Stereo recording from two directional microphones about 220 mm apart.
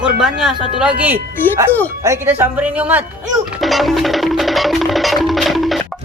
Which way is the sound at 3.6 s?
Centre (ahead or behind).